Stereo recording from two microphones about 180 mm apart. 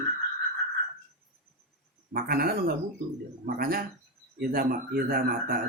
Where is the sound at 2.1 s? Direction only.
55° right (ahead or behind).